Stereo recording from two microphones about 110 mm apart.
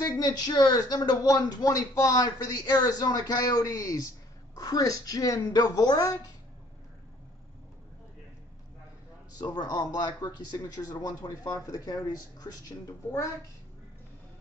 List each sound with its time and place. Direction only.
0.0 s speech: 35° left (ahead or behind)
9.4 s speech: 35° left (ahead or behind)